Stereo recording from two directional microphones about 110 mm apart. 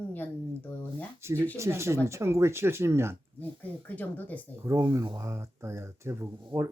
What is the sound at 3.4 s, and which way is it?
Speech, 15° left (ahead or behind).